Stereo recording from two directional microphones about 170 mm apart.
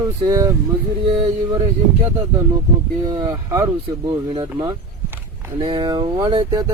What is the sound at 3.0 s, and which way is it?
Speech, 25° right (ahead or behind).